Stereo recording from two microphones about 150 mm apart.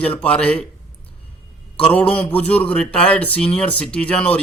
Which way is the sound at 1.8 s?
5° left (ahead or behind).